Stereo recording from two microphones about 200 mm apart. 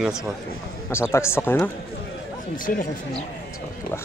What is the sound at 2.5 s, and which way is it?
Speech, 45° left (ahead or behind).